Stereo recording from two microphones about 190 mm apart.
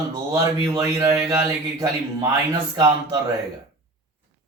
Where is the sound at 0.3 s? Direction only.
15° right (ahead or behind).